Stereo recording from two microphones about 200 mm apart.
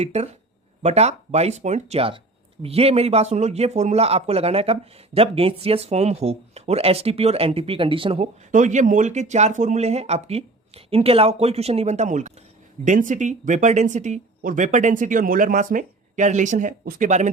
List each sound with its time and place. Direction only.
0.0 s speech: 30° right (ahead or behind)
8.5 s speech: 40° right (ahead or behind)